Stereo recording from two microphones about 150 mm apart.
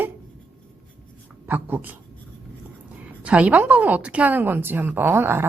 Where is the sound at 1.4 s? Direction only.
15° right (ahead or behind).